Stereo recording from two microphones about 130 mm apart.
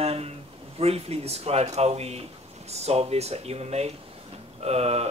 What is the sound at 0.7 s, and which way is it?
Speech, 50° right (ahead or behind).